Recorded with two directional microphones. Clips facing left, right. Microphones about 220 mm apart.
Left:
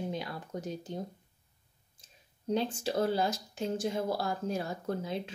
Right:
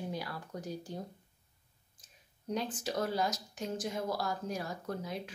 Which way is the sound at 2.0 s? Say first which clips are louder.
Left 5 dB; 25° left (ahead or behind).